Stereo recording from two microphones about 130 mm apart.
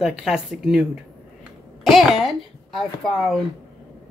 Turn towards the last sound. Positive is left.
turn(degrees=5)  # may be behind; listen again after turning